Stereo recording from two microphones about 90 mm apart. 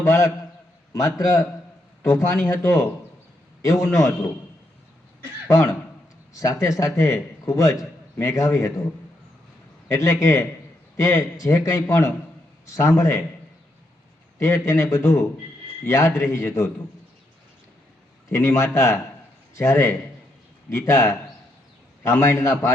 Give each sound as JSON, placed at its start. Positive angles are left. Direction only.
{"t": 0.0, "sound": "a man's voice", "side_deg": 35}
{"t": 5.5, "sound": "a man's voice", "side_deg": 35}
{"t": 9.9, "sound": "a man's voice", "side_deg": 35}
{"t": 14.3, "sound": "a man's voice", "side_deg": 30}
{"t": 18.3, "sound": "a man's voice", "side_deg": 30}